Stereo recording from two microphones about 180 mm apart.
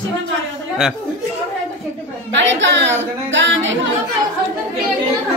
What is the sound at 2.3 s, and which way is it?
Speech, 90° right.